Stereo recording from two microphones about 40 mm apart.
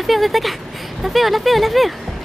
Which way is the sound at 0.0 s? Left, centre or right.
Centre.